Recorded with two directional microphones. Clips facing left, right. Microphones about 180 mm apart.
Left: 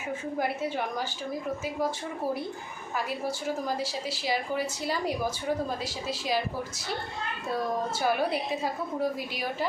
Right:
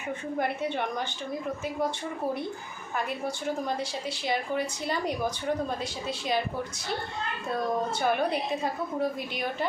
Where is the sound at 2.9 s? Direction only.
5° left (ahead or behind).